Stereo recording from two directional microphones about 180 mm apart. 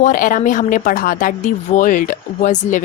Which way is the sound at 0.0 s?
50° left (ahead or behind).